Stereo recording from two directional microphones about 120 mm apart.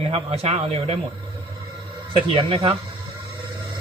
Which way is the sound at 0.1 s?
60° right (ahead or behind).